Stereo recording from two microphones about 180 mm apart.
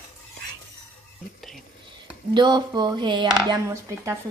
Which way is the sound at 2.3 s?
25° right (ahead or behind).